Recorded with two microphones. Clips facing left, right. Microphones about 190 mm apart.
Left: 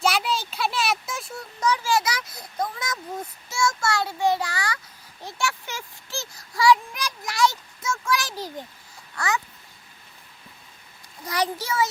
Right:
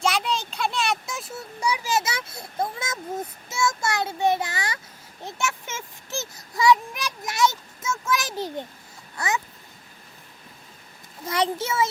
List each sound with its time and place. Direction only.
0.0 s a child's voice: 5° left (ahead or behind); by 4.8 s 20° right (ahead or behind)
5.2 s child singing: 20° right (ahead or behind)
9.1 s babbling: 20° right (ahead or behind)
11.3 s a child's voice: 25° right (ahead or behind)